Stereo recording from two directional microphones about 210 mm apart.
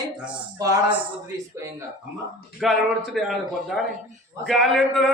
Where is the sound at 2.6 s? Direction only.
Centre (ahead or behind).